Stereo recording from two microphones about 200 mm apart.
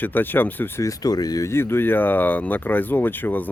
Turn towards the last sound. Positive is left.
turn(degrees=10)  # may be behind; listen again after turning